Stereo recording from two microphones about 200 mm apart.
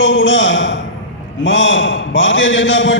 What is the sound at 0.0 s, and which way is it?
A man's voice, 70° left (ahead or behind).